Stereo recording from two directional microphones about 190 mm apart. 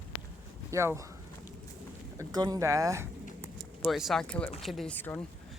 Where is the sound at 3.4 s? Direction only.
Centre (ahead or behind).